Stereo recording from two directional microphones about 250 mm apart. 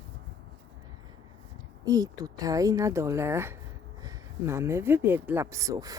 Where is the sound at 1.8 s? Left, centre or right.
Centre.